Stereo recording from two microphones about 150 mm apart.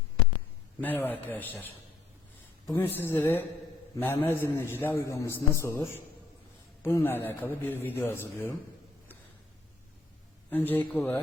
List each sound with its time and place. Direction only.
0.8 s a man's voice: 10° left (ahead or behind)
10.5 s a man's voice: 10° left (ahead or behind)